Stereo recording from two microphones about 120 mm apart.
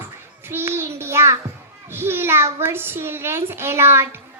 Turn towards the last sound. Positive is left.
turn(degrees=-20)  # may be behind; listen again after turning